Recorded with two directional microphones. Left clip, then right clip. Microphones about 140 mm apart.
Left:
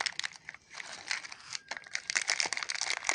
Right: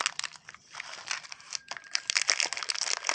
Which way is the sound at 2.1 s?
15° right (ahead or behind).